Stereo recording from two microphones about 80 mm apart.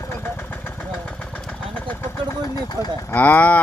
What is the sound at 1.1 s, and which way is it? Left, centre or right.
Vehicle, centre.